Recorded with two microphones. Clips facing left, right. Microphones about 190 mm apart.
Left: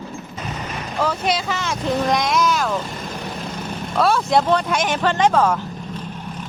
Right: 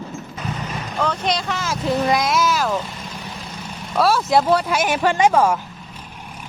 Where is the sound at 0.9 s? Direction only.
5° left (ahead or behind).